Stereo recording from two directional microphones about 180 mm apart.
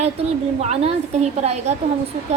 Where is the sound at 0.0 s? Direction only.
35° right (ahead or behind).